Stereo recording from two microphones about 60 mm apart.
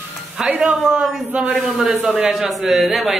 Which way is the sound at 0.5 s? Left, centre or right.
Right.